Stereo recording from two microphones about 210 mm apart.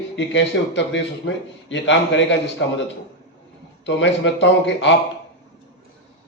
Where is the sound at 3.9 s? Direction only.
60° left (ahead or behind).